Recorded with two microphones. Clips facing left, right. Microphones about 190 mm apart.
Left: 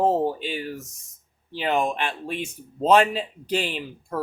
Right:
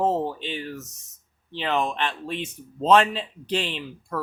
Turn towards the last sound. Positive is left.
turn(degrees=10)  # may be behind; listen again after turning